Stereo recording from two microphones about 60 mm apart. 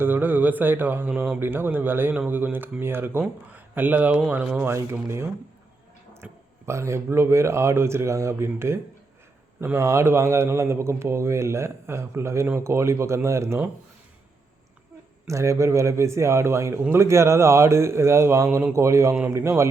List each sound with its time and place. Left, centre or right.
0.0 s mantra: right
1.1 s speech: centre
1.4 s mantra: right
3.5 s speech: right
4.6 s a man's voice: right
6.2 s speech: right
6.7 s a man's voice: right
15.3 s a man's voice: right